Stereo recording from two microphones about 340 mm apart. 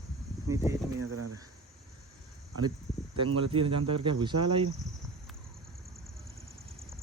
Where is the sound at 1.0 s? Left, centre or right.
Right.